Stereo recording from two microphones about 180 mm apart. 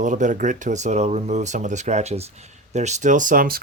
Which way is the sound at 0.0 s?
45° right (ahead or behind).